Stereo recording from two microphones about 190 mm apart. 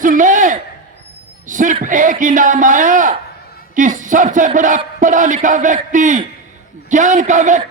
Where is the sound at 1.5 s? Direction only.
45° right (ahead or behind).